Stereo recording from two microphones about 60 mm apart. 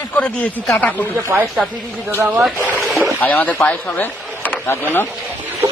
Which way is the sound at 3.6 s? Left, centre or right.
Left.